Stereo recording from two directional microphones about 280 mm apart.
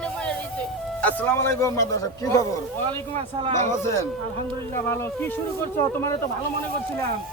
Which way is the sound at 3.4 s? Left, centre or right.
Right.